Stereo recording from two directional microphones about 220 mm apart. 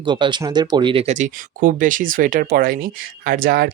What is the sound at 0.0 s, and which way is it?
Speech, 20° right (ahead or behind).